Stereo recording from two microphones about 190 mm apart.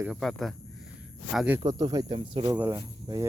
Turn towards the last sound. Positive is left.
turn(degrees=-25)  # may be behind; listen again after turning